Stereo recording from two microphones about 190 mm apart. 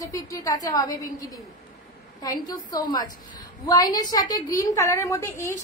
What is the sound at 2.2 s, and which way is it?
Speech, 20° left (ahead or behind).